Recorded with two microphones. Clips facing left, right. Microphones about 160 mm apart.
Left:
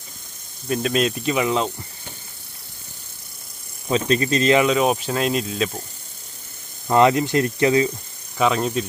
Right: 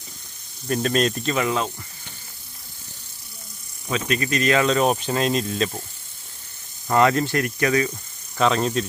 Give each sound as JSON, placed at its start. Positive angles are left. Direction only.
{"t": 0.7, "sound": "speech", "side_deg": 5}
{"t": 3.8, "sound": "speech", "side_deg": 30}
{"t": 4.6, "sound": "speech", "side_deg": 5}
{"t": 6.9, "sound": "speech", "side_deg": 20}
{"t": 8.4, "sound": "speech", "side_deg": 5}